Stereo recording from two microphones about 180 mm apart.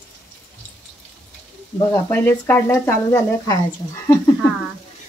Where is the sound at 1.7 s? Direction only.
15° left (ahead or behind).